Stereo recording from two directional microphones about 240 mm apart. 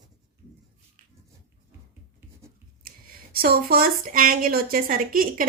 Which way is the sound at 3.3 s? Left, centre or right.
Right.